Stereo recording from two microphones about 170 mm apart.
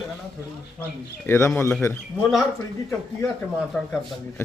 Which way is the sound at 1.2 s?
15° left (ahead or behind).